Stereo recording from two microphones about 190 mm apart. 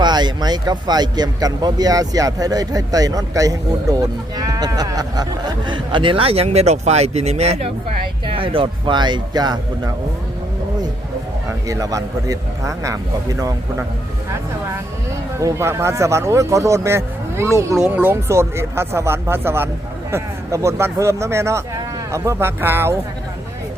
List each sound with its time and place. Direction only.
0.0 s speech: 20° right (ahead or behind)
11.7 s speech: 20° right (ahead or behind)
15.4 s speech: 15° right (ahead or behind)